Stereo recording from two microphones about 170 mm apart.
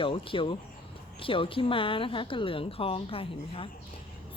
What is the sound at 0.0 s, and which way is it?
A woman's voice, 30° left (ahead or behind).